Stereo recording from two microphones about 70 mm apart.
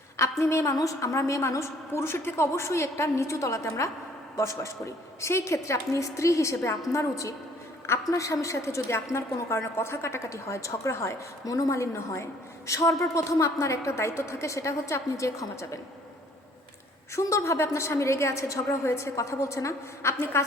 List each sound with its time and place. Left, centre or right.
0.2 s a woman's voice: left
11.4 s a woman's voice: left
11.7 s a woman's voice: left
17.2 s a woman's voice: left